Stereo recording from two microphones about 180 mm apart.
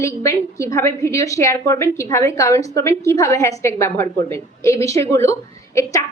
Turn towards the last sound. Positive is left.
turn(degrees=15)  # may be behind; listen again after turning